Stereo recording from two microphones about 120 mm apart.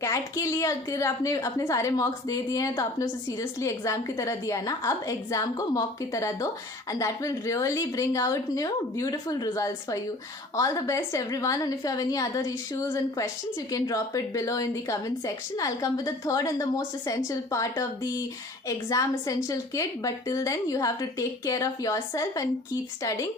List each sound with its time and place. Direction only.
0.0 s a woman's voice: 25° left (ahead or behind)